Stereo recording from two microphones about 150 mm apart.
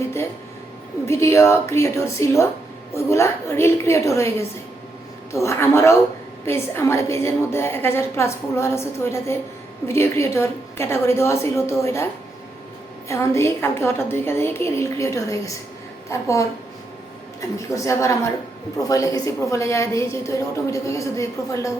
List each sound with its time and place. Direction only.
1.0 s a woman's voice: 20° left (ahead or behind)
13.1 s a woman's voice: 20° left (ahead or behind)